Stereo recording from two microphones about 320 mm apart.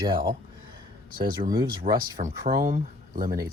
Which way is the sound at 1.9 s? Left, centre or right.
Right.